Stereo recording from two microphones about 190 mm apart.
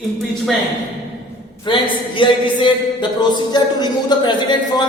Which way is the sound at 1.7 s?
25° left (ahead or behind).